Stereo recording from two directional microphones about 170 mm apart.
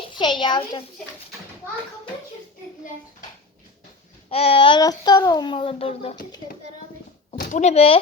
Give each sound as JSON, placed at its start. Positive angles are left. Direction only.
{"t": 0.1, "sound": "a child's voice", "side_deg": 25}
{"t": 4.3, "sound": "speech", "side_deg": 35}
{"t": 7.3, "sound": "speech", "side_deg": 45}